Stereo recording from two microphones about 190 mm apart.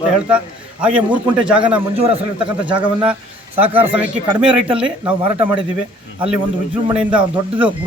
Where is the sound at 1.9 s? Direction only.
30° right (ahead or behind).